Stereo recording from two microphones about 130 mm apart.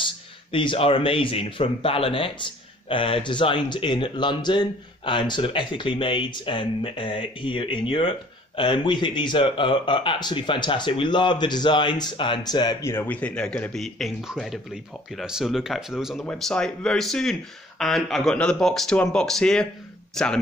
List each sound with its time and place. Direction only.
0.0 s speech: 40° left (ahead or behind)
12.9 s speech: 15° left (ahead or behind)